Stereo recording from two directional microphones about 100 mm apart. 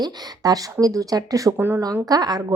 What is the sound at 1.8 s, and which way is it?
Speech, 40° right (ahead or behind).